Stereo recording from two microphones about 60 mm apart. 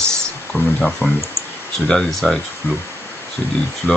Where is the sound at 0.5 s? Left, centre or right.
Left.